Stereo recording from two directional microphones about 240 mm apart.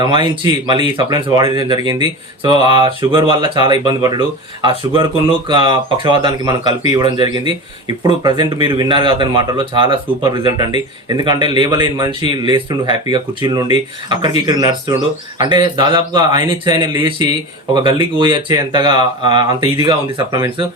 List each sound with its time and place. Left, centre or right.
0.0 s speech: centre